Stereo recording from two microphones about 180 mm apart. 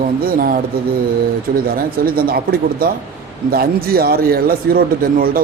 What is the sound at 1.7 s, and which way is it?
Speech, 55° right (ahead or behind).